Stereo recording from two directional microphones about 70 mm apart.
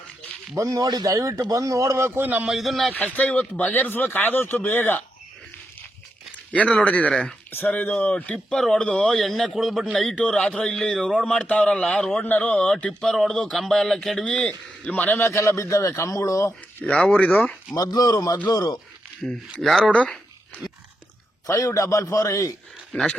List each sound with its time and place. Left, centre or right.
0.5 s a man's voice: right
0.9 s speech: right
1.1 s a man's voice: right
2.5 s speech: centre
2.9 s speech: left
6.5 s speech: centre
14.3 s speech: centre
15.2 s a man's voice: left
16.8 s speech: centre
17.9 s speech: left
19.5 s speech: centre
21.4 s a man's voice: left
22.9 s speech: centre